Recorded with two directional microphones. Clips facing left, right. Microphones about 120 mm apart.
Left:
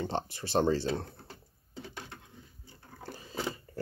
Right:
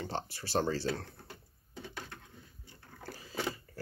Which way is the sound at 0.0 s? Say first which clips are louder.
Left 4 dB; 20° left (ahead or behind).